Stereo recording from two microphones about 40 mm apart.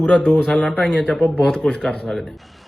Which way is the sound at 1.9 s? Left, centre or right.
Centre.